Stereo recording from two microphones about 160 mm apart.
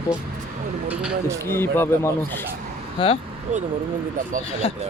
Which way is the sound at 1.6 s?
15° left (ahead or behind).